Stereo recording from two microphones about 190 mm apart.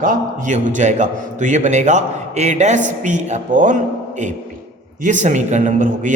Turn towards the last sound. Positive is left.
turn(degrees=-40)  # may be behind; listen again after turning